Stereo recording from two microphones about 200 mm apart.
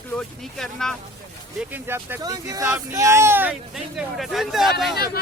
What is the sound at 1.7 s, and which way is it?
Speech, 10° right (ahead or behind).